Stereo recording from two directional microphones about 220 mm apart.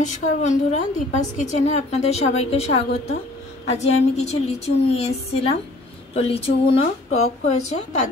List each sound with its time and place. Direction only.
0.0 s a woman's voice: 35° left (ahead or behind)